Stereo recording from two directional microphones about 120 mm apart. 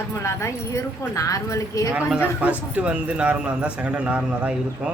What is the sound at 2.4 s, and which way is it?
A man's voice, 10° right (ahead or behind).